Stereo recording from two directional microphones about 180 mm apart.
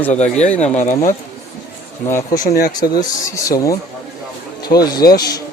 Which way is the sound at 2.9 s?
20° left (ahead or behind).